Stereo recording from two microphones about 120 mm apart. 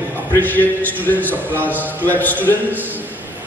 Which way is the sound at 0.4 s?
15° left (ahead or behind).